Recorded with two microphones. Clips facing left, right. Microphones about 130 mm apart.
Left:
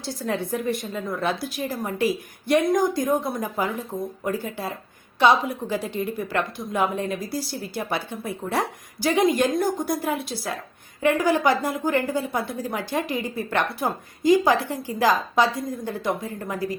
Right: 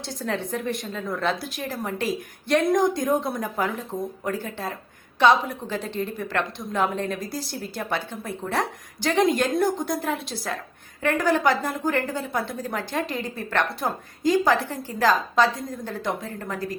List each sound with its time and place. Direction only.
0.0 s a woman's voice: 5° left (ahead or behind)